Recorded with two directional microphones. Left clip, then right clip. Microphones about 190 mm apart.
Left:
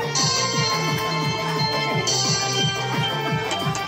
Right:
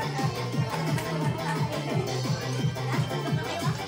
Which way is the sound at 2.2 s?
55° left (ahead or behind).